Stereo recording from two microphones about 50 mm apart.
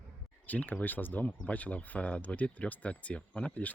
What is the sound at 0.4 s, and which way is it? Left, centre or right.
Speech, left.